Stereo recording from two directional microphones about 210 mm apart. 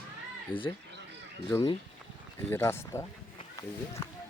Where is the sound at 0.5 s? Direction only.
25° left (ahead or behind).